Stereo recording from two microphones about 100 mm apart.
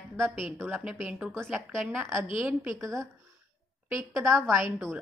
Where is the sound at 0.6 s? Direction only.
20° right (ahead or behind).